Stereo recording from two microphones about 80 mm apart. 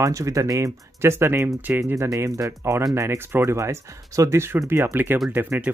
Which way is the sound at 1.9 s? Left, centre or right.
Right.